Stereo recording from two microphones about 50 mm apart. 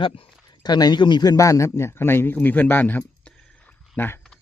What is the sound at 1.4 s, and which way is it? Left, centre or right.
Speech, left.